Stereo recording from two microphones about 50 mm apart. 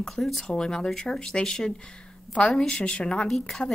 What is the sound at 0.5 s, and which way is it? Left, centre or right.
Speech, centre.